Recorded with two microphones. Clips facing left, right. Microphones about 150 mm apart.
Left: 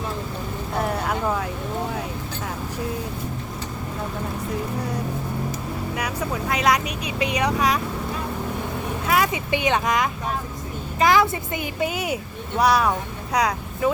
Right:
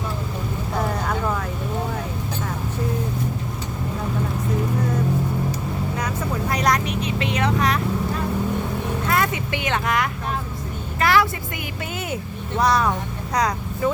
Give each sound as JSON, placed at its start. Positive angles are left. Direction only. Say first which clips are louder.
{"t": 0.8, "sound": "vehicle", "louder": "left 1 dB", "side_deg": 10}
{"t": 6.0, "sound": "vehicle", "louder": "left 1 dB", "side_deg": 5}
{"t": 7.0, "sound": "speech", "louder": "even", "side_deg": 15}
{"t": 9.0, "sound": "speech", "louder": "left 2 dB", "side_deg": 10}